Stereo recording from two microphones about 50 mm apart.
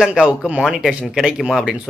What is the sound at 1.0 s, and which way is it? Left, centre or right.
Speech, centre.